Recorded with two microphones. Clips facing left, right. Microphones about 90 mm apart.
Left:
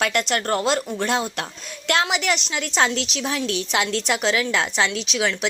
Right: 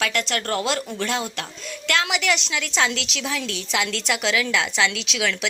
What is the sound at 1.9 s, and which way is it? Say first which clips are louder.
A woman's voice: left 1 dB; 40° left (ahead or behind).